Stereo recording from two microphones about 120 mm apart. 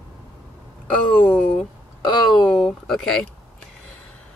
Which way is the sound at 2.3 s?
50° left (ahead or behind).